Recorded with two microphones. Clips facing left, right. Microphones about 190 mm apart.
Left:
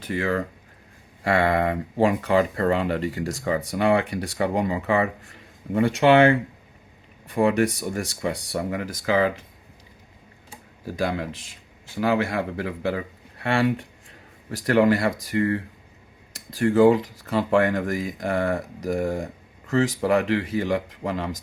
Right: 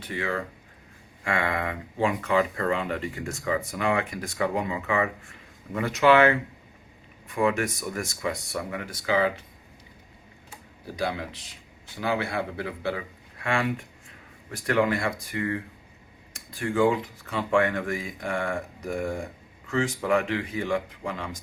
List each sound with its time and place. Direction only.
0.0 s speech: 40° left (ahead or behind)
10.8 s speech: 45° left (ahead or behind)